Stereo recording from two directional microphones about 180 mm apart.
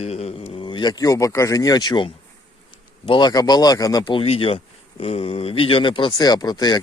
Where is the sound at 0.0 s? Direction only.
35° left (ahead or behind).